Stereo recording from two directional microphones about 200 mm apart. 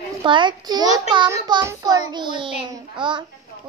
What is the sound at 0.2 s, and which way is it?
A child's voice, 25° right (ahead or behind).